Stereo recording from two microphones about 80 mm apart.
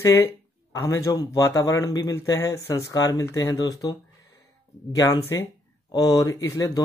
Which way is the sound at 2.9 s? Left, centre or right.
Left.